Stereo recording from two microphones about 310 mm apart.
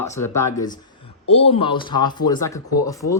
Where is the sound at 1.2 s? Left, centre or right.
Centre.